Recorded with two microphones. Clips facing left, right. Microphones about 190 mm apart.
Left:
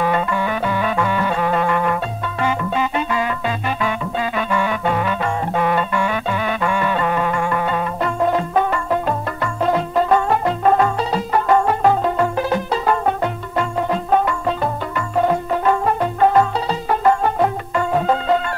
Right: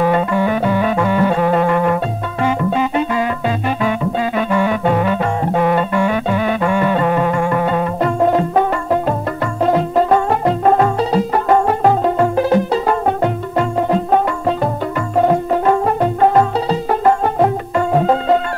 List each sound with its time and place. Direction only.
0.0 s music: 40° right (ahead or behind)